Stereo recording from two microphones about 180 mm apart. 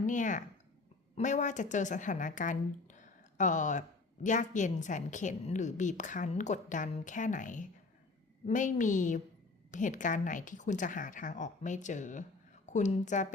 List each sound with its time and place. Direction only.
0.0 s speech: 45° left (ahead or behind)